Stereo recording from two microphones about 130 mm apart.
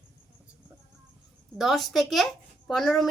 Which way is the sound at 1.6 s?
Centre (ahead or behind).